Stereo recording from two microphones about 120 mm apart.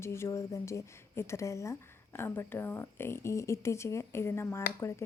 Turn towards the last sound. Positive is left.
turn(degrees=20)  # may be behind; listen again after turning